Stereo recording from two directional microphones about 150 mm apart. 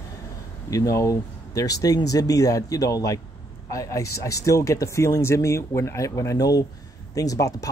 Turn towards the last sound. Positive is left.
turn(degrees=20)  # may be behind; listen again after turning